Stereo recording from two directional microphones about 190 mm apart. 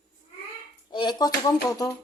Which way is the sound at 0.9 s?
25° left (ahead or behind).